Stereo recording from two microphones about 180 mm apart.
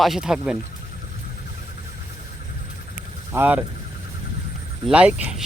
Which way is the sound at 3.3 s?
10° right (ahead or behind).